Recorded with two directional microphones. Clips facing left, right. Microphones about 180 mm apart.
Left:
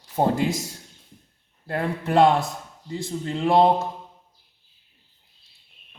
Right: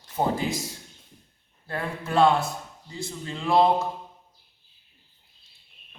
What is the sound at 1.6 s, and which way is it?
Speech, 35° left (ahead or behind).